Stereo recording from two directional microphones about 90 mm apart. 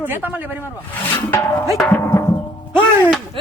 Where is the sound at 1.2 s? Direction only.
25° left (ahead or behind).